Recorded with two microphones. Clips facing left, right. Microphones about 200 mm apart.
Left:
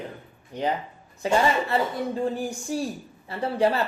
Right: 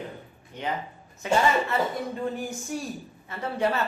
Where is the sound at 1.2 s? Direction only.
30° left (ahead or behind).